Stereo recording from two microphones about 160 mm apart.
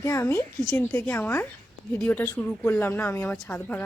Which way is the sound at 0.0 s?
20° left (ahead or behind).